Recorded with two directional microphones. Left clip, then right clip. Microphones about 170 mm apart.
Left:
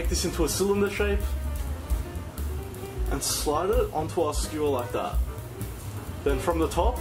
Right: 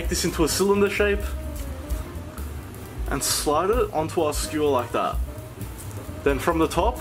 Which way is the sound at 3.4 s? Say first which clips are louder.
Right 3 dB; 30° right (ahead or behind).